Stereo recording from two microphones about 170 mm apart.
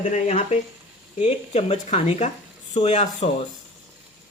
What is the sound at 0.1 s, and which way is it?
Speech, 40° left (ahead or behind).